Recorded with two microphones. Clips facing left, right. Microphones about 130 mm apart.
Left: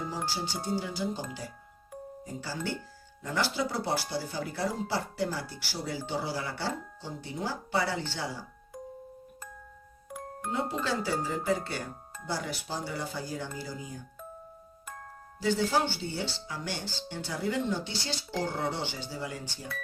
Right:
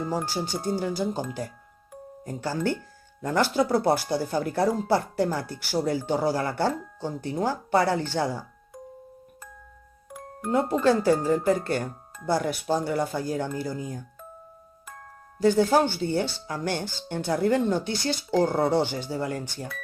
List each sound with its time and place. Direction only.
0.1 s speech: 50° right (ahead or behind)
10.1 s music: centre (ahead or behind)
10.5 s speech: 50° right (ahead or behind)
15.4 s speech: 50° right (ahead or behind)